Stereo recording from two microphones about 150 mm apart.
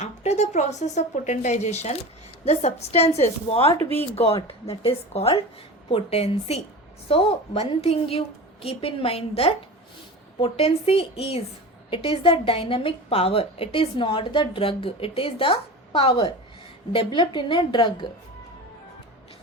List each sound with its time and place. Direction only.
0.0 s a woman's voice: 50° left (ahead or behind); by 17.9 s 30° left (ahead or behind)